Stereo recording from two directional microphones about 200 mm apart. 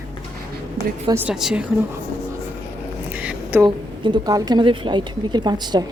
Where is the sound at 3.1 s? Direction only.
5° right (ahead or behind).